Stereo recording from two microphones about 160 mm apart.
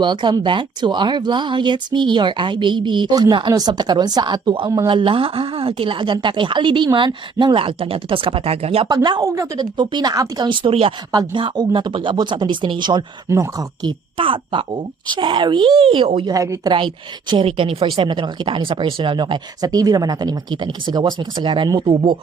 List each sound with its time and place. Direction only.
0.0 s a woman's voice: 30° right (ahead or behind)
8.9 s a woman's voice: 25° right (ahead or behind)
14.2 s a woman's voice: 35° right (ahead or behind)
16.7 s a woman's voice: 30° right (ahead or behind)